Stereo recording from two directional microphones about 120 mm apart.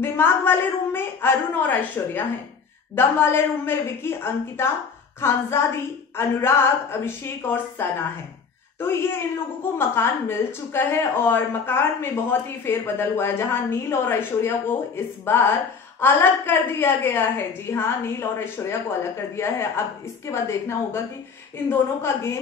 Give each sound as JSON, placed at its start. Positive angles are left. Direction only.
{"t": 0.0, "sound": "a woman's voice", "side_deg": 20}
{"t": 8.7, "sound": "a woman's voice", "side_deg": 20}